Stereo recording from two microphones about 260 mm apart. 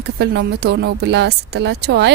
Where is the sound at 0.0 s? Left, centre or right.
Right.